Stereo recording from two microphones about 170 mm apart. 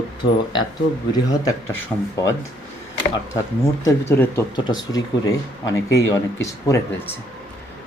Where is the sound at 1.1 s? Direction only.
20° left (ahead or behind).